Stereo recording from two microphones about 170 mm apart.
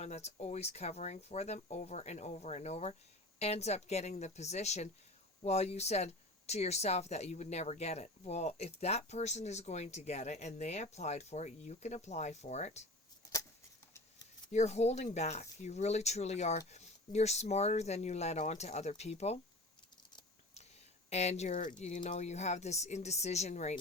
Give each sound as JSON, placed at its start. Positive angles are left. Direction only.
{"t": 0.0, "sound": "speech", "side_deg": 40}
{"t": 14.5, "sound": "speech", "side_deg": 40}
{"t": 21.1, "sound": "speech", "side_deg": 40}